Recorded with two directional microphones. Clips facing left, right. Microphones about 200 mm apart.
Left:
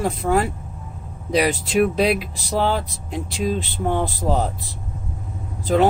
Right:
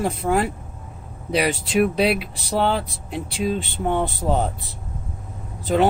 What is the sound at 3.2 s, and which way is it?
Speech, 40° left (ahead or behind).